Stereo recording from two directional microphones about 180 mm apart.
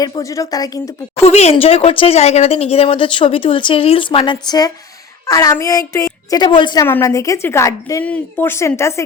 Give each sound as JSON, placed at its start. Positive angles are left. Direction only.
{"t": 0.0, "sound": "a woman's voice", "side_deg": 20}
{"t": 1.2, "sound": "a woman's voice", "side_deg": 35}
{"t": 6.8, "sound": "a woman's voice", "side_deg": 15}